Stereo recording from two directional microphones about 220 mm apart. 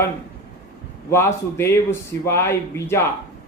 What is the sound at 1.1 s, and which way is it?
Speech, 10° left (ahead or behind).